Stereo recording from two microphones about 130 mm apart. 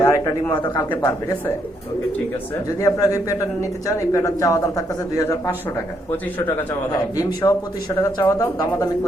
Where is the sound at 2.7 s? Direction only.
25° left (ahead or behind).